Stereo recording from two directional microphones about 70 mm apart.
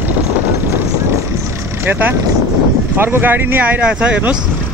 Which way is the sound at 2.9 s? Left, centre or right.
Right.